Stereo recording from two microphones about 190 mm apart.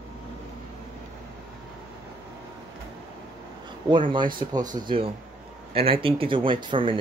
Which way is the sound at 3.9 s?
25° right (ahead or behind).